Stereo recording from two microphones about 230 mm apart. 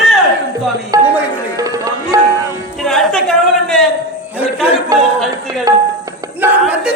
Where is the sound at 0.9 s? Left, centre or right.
Centre.